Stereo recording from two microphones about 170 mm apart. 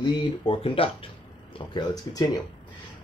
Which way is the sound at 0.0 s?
30° left (ahead or behind).